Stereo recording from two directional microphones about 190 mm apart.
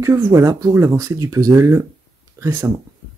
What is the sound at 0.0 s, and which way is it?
Speech, 15° right (ahead or behind).